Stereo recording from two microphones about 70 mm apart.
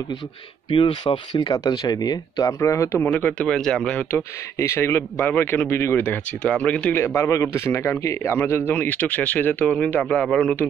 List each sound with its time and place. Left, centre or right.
1.1 s speech: left
1.5 s speech: left
2.6 s speech: left
3.0 s a man's voice: left
3.4 s speech: centre
4.1 s speech: left
5.3 s speech: left
6.0 s speech: centre
7.2 s speech: left
8.8 s a man's voice: left